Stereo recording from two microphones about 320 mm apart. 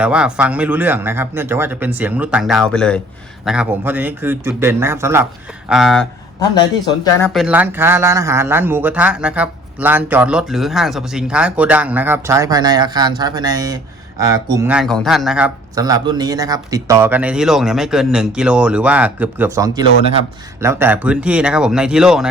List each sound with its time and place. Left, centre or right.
0.0 s speech: centre
6.5 s speech: centre
7.3 s speech: centre
19.8 s speech: left
20.6 s speech: centre